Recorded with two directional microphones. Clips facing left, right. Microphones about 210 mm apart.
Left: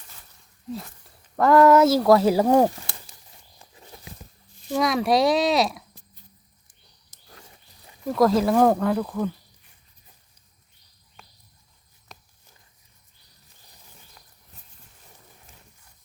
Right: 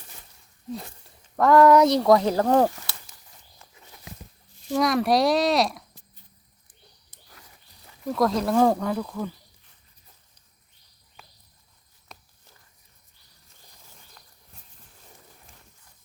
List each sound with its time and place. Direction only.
1.4 s speech: centre (ahead or behind)
4.7 s speech: centre (ahead or behind)
7.3 s wild animals: 30° left (ahead or behind)
8.0 s speech: centre (ahead or behind)
11.2 s cricket: 5° right (ahead or behind)
12.1 s a sound: centre (ahead or behind)